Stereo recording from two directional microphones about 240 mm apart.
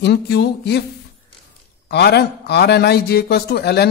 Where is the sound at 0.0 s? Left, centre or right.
Left.